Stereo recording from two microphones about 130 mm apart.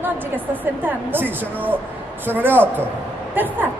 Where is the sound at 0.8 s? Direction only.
15° right (ahead or behind).